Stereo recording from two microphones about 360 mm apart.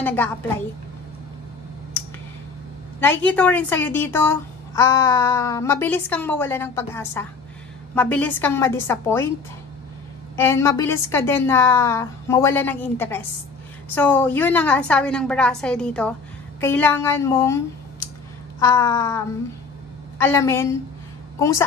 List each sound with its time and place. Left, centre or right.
0.0 s a woman's voice: centre
3.0 s a woman's voice: centre
10.3 s a woman's voice: centre